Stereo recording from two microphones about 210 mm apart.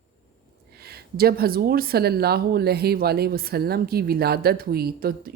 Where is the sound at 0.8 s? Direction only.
45° right (ahead or behind).